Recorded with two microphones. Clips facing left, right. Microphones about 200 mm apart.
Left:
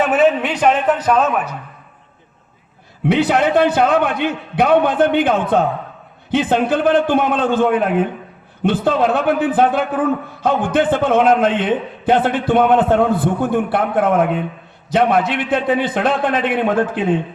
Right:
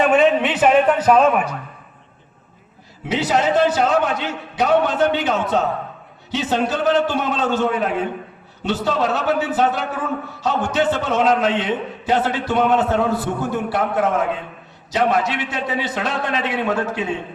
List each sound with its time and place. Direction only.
0.1 s a man's voice: centre (ahead or behind)
3.1 s a man's voice: 60° left (ahead or behind)